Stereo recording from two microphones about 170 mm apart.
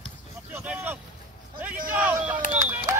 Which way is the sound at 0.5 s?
10° right (ahead or behind).